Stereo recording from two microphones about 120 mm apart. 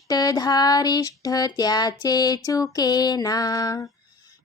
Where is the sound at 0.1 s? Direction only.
30° left (ahead or behind).